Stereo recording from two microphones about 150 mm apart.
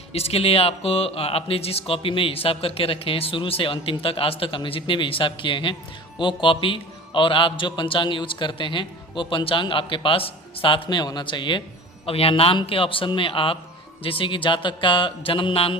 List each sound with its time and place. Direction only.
0.1 s speech: 40° left (ahead or behind)